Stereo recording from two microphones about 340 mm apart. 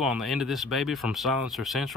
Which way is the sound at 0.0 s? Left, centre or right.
Centre.